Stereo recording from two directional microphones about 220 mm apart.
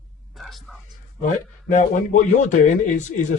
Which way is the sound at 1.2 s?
35° left (ahead or behind).